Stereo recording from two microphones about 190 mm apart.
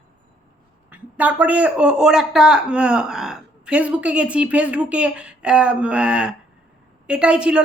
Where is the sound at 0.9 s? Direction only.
10° right (ahead or behind).